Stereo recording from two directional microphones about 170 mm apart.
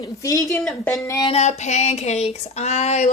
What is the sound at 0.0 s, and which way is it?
Speech, 20° left (ahead or behind).